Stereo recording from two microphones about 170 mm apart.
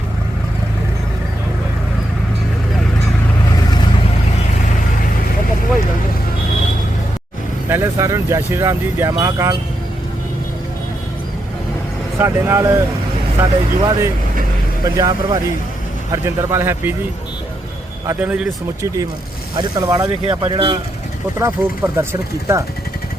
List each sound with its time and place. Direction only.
7.7 s speech: 15° right (ahead or behind)
12.2 s speech: 15° right (ahead or behind)
18.0 s speech: 10° right (ahead or behind)
19.5 s speech: 25° right (ahead or behind)
21.3 s speech: 15° right (ahead or behind)